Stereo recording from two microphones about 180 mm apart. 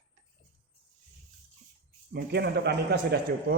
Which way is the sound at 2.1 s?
65° right (ahead or behind).